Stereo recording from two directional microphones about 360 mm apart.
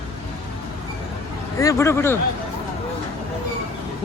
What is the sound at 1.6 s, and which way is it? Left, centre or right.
Speech, centre.